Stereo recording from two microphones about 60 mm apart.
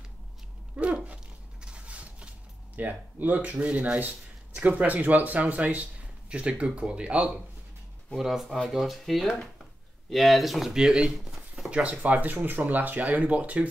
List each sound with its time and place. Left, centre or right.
0.7 s dog: right
2.7 s speech: right
8.2 s speech: centre
11.7 s speech: right